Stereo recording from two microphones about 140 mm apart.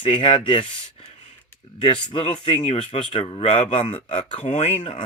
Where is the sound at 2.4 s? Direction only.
45° left (ahead or behind).